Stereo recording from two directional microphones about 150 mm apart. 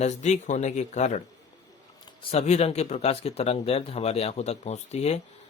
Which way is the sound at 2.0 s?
40° left (ahead or behind).